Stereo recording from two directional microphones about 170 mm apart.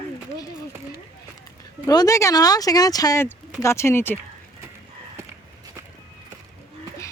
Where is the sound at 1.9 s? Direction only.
20° left (ahead or behind).